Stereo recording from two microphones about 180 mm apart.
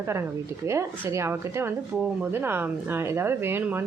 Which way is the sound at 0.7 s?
15° right (ahead or behind).